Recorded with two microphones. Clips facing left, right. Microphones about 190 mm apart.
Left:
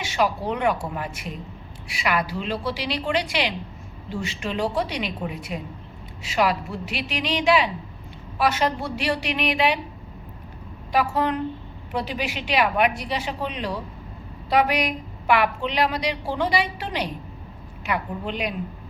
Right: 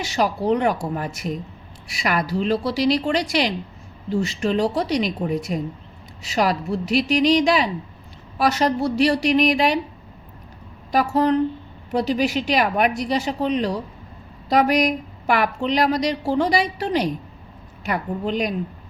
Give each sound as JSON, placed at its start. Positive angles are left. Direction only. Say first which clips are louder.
{"t": 0.0, "sound": "a woman's voice", "louder": "right 2 dB", "side_deg": -40}
{"t": 10.9, "sound": "a woman's voice", "louder": "right 5 dB", "side_deg": -40}